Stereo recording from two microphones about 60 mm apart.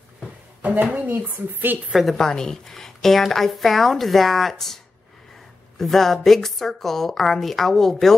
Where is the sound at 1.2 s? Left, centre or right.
Right.